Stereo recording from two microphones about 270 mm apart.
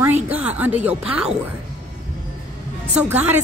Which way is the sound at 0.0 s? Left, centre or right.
Centre.